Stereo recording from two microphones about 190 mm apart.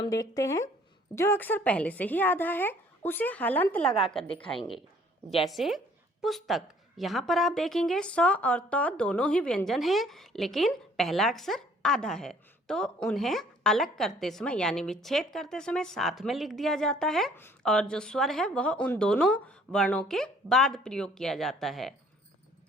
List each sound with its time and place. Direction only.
0.0 s a woman's voice: 20° left (ahead or behind); by 21.9 s centre (ahead or behind)